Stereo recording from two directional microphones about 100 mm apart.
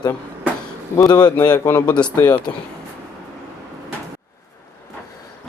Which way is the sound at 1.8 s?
10° left (ahead or behind).